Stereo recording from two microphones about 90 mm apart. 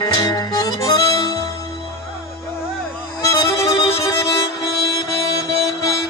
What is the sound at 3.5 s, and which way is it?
Music, 35° left (ahead or behind).